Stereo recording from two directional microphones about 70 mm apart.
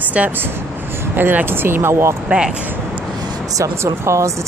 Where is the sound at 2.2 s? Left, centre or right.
Centre.